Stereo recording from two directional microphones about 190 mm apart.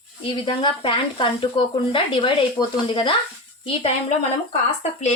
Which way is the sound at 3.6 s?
30° left (ahead or behind).